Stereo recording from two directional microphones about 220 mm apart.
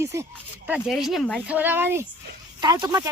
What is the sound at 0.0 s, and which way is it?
Speech, 10° right (ahead or behind).